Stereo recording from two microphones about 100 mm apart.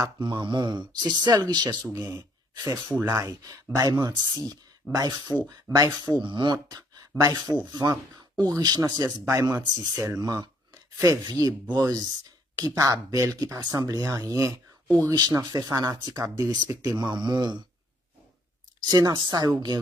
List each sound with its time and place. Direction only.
0.2 s speech: 50° right (ahead or behind)
2.0 s speech: 30° right (ahead or behind); by 17.6 s 45° right (ahead or behind)
18.8 s speech: 40° right (ahead or behind)